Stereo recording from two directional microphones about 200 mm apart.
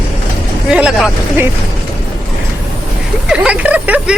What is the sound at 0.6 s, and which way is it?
Speech, 5° right (ahead or behind).